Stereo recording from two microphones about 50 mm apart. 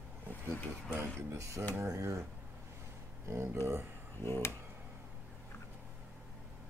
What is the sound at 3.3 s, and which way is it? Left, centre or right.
Speech, right.